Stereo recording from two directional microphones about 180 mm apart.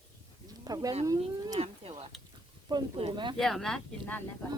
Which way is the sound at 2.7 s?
30° right (ahead or behind).